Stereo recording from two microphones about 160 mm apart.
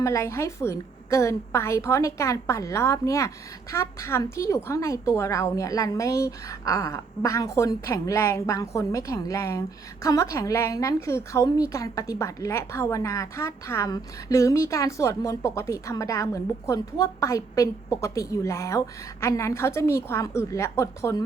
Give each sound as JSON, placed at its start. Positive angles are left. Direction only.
{"t": 0.0, "sound": "a woman's voice", "side_deg": 20}